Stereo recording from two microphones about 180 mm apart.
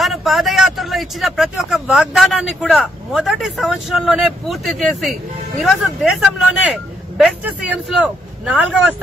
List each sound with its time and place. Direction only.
0.0 s speech: centre (ahead or behind)